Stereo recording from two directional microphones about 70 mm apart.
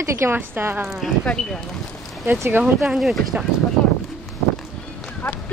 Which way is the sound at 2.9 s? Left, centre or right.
Centre.